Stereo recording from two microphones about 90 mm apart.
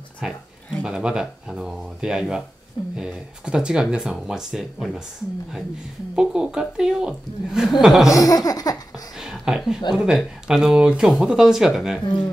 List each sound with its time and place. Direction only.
0.2 s speech: 5° right (ahead or behind)
6.1 s speech: 10° right (ahead or behind)
8.1 s laughter: 40° left (ahead or behind)
9.1 s speech: 5° right (ahead or behind)